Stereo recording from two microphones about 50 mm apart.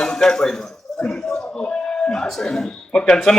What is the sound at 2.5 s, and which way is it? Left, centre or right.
Speech, centre.